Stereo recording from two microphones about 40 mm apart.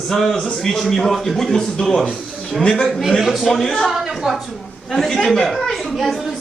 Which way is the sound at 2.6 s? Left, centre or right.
Left.